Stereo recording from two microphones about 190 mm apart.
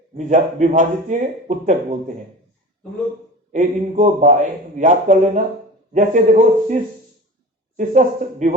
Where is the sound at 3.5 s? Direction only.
40° right (ahead or behind).